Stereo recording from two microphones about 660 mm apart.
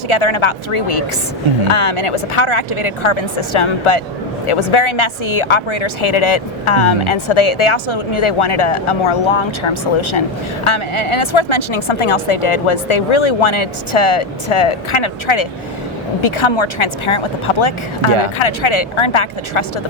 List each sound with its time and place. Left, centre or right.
0.1 s a woman's voice: left